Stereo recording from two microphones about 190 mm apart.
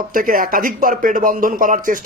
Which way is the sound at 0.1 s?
45° right (ahead or behind).